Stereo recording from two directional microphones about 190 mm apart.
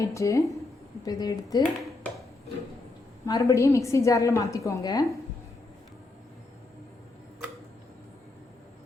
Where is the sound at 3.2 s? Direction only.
15° left (ahead or behind).